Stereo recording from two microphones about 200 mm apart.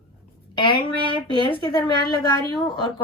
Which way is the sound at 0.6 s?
25° left (ahead or behind).